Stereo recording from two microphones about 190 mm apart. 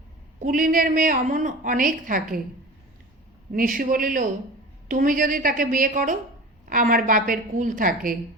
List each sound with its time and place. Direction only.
0.3 s a woman's voice: 45° right (ahead or behind)
3.5 s a woman's voice: 45° right (ahead or behind)